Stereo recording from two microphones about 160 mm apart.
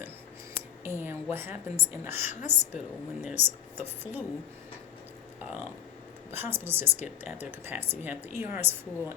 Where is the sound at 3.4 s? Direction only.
45° left (ahead or behind).